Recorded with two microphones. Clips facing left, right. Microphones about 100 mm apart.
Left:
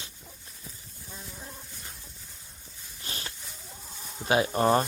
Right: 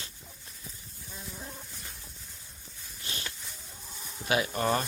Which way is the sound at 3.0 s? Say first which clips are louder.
Even; 35° left (ahead or behind).